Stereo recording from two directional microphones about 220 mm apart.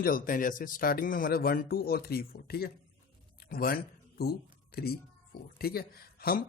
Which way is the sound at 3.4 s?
45° left (ahead or behind).